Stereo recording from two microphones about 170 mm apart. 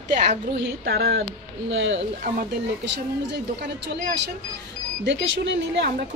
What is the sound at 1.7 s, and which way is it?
Speech, 90° right.